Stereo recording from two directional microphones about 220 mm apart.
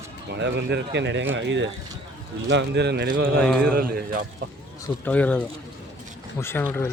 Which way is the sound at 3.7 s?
45° right (ahead or behind).